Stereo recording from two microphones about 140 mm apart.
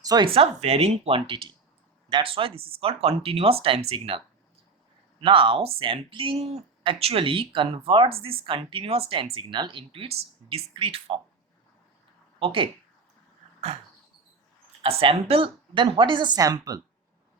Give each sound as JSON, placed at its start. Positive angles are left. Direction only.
{"t": 0.0, "sound": "speech", "side_deg": -25}
{"t": 0.3, "sound": "speech", "side_deg": -45}
{"t": 5.2, "sound": "speech", "side_deg": -40}
{"t": 12.4, "sound": "speech", "side_deg": -40}
{"t": 14.8, "sound": "speech", "side_deg": -45}